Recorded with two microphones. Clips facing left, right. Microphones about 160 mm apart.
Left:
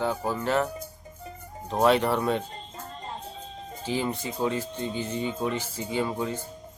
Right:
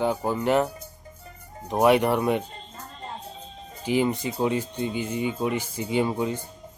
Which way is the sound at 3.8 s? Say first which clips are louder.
Right 5 dB; 15° right (ahead or behind).